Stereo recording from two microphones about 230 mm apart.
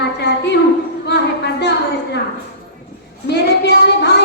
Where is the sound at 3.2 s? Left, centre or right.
Left.